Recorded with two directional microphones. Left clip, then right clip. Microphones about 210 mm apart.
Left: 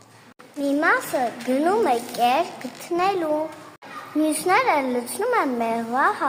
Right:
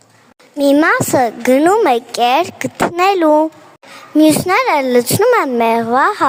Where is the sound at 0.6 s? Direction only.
50° right (ahead or behind).